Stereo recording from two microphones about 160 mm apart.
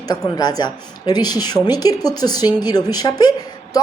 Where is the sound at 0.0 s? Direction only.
25° left (ahead or behind).